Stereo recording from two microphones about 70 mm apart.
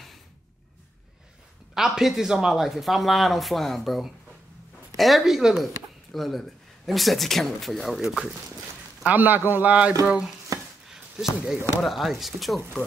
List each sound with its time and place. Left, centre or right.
1.8 s speech: centre
9.0 s speech: right
10.9 s a sound: centre
11.8 s speech: centre